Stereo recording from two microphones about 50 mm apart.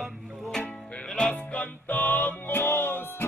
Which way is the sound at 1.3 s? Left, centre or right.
Left.